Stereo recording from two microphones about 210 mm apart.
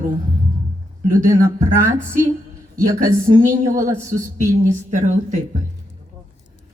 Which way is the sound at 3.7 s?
15° right (ahead or behind).